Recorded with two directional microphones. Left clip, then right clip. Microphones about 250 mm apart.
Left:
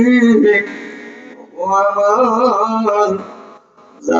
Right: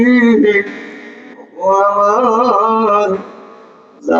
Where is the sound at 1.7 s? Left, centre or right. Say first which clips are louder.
Right 2 dB; right.